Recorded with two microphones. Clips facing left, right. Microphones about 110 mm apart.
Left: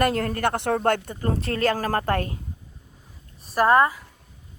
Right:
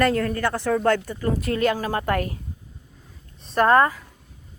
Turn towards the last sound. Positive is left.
turn(degrees=10)  # may be behind; listen again after turning